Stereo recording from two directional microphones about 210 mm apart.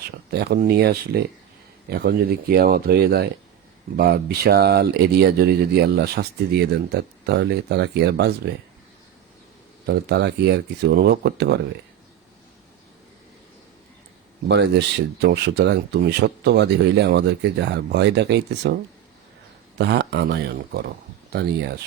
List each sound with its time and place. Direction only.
0.3 s speech: 50° right (ahead or behind)
9.8 s speech: 50° right (ahead or behind)
14.4 s speech: 55° right (ahead or behind)
19.8 s speech: 55° right (ahead or behind)